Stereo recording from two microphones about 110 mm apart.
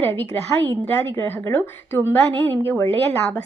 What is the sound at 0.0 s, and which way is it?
A woman's voice, 20° left (ahead or behind).